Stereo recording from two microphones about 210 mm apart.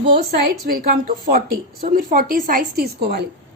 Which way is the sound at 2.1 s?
40° right (ahead or behind).